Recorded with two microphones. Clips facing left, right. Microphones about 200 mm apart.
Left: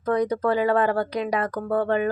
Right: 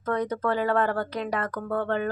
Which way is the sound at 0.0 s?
10° left (ahead or behind).